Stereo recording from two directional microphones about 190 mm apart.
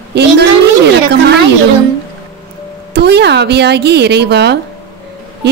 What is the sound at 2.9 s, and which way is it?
A woman's voice, 60° right (ahead or behind).